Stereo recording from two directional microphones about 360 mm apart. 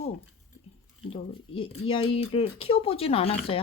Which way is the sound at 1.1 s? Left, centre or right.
Centre.